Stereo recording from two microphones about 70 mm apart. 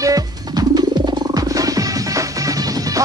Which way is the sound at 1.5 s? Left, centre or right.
Right.